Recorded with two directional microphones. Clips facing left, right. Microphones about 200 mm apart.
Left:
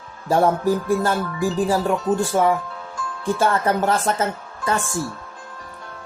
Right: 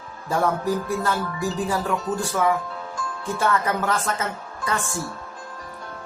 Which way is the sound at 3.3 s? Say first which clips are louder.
Left 3 dB; 30° left (ahead or behind).